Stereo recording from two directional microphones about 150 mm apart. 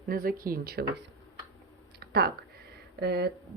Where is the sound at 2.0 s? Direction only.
90° right.